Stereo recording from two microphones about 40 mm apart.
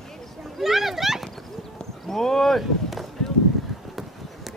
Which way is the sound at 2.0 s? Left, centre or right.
Centre.